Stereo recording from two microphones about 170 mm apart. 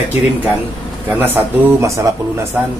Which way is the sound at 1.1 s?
10° right (ahead or behind).